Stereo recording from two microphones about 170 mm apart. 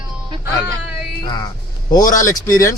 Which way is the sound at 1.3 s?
25° left (ahead or behind).